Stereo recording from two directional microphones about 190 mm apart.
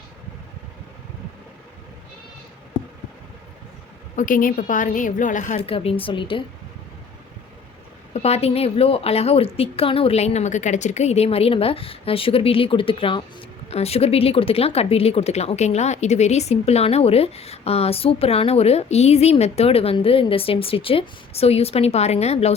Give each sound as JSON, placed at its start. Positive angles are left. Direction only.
{"t": 4.1, "sound": "speech", "side_deg": 45}
{"t": 8.1, "sound": "speech", "side_deg": 35}